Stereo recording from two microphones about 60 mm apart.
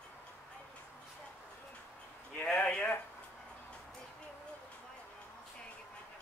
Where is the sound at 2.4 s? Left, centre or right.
Left.